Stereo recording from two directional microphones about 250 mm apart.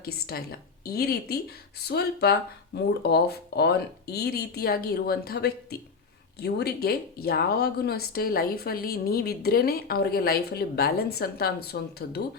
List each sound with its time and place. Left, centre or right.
0.0 s speech: left